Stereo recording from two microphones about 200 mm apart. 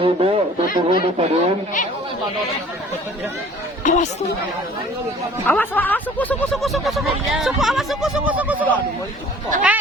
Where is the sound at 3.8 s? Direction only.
40° left (ahead or behind).